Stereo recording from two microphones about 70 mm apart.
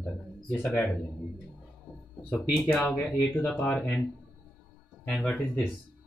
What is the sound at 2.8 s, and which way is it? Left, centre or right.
Speech, left.